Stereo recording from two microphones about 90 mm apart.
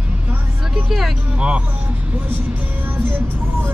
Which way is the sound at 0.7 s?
5° right (ahead or behind).